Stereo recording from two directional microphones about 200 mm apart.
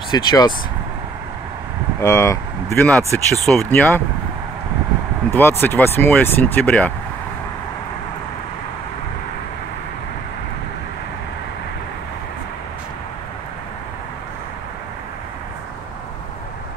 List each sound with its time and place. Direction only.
0.1 s speech: 20° left (ahead or behind)
2.0 s speech: 15° left (ahead or behind)
5.3 s speech: 10° left (ahead or behind)